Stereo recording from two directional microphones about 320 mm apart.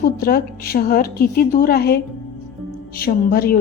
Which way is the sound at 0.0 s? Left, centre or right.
Left.